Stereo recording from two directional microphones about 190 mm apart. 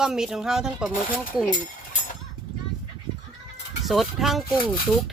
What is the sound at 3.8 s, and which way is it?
Speech, centre (ahead or behind).